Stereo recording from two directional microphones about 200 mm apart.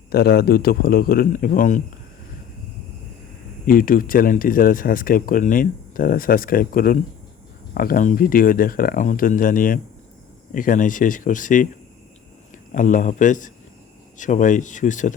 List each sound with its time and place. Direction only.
0.1 s speech: 50° left (ahead or behind)
3.7 s speech: 45° left (ahead or behind)
12.7 s speech: 40° left (ahead or behind)